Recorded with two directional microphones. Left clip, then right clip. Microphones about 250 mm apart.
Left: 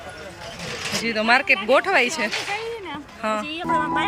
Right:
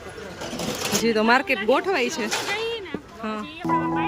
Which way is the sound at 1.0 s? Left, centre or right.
Centre.